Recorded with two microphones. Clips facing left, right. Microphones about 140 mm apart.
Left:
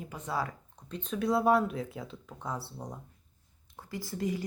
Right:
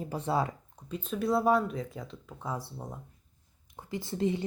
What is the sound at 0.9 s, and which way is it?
Speech, 5° right (ahead or behind).